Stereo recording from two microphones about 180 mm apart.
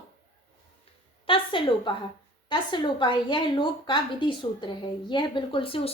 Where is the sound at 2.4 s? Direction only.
25° left (ahead or behind).